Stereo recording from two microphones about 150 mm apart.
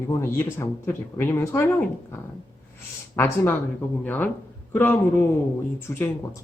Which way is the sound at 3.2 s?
15° left (ahead or behind).